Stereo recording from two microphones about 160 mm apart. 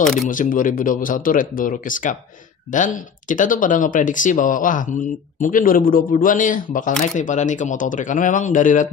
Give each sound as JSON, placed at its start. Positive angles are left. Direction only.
{"t": 0.0, "sound": "speech", "side_deg": 5}
{"t": 0.3, "sound": "speech", "side_deg": 55}